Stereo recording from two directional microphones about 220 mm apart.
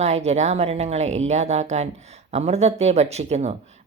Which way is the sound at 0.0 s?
30° right (ahead or behind).